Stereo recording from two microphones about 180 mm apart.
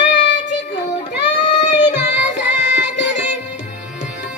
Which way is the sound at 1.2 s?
75° left (ahead or behind).